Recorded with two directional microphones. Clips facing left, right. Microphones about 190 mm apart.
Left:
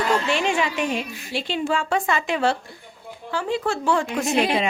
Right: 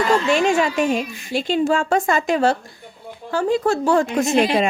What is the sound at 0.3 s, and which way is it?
A woman's voice, 40° right (ahead or behind).